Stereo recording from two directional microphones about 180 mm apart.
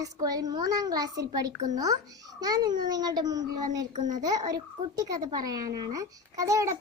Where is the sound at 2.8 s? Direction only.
20° right (ahead or behind).